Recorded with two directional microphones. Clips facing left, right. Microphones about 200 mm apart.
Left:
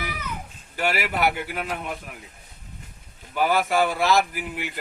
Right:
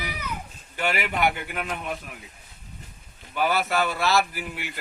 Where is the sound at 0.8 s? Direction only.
5° left (ahead or behind).